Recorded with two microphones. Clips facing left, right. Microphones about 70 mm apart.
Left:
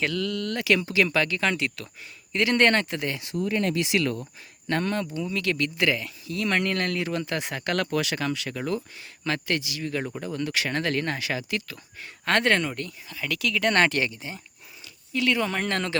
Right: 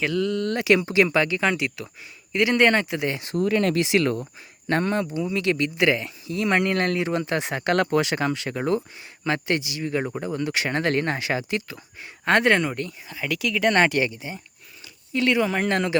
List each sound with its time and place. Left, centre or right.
0.1 s speech: right
3.4 s speech: right
3.8 s speech: right
12.2 s speech: centre
15.1 s speech: right
15.4 s speech: centre